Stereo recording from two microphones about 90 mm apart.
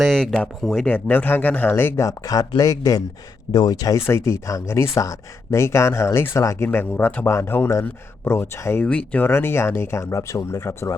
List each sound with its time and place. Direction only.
0.0 s speech: 5° left (ahead or behind)
0.9 s speech: 20° left (ahead or behind)
2.0 s speech: 40° left (ahead or behind)
3.5 s speech: 50° left (ahead or behind)
4.0 s speech: 30° left (ahead or behind)
6.7 s speech: 20° left (ahead or behind)